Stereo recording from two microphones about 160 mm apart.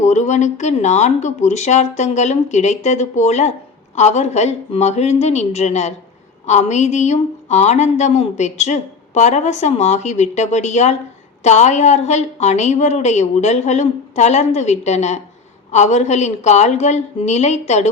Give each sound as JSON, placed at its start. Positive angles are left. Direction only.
{"t": 0.0, "sound": "a woman's voice", "side_deg": 45}